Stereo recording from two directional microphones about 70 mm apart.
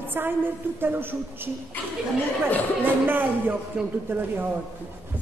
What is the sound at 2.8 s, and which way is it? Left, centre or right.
Speech, right.